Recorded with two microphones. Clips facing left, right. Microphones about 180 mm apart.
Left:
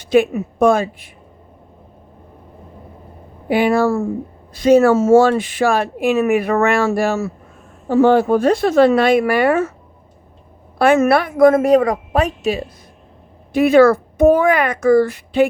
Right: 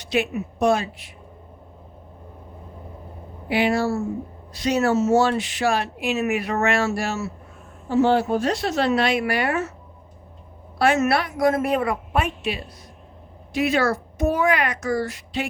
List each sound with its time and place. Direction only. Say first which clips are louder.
0.0 s speech: left 9 dB; 50° left (ahead or behind)
3.5 s speech: left 6 dB; 50° left (ahead or behind)
10.8 s speech: left 6 dB; 55° left (ahead or behind)
13.5 s a child's voice: left 11 dB; 55° left (ahead or behind)